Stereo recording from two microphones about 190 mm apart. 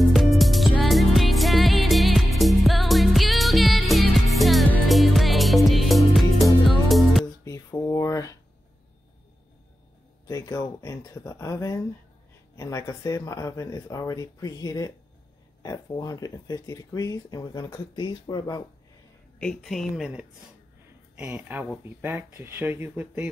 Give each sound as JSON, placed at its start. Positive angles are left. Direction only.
{"t": 0.1, "sound": "music", "side_deg": 0}
{"t": 7.4, "sound": "a sound", "side_deg": 15}
{"t": 10.2, "sound": "speech", "side_deg": 20}
{"t": 19.3, "sound": "a woman's voice", "side_deg": 5}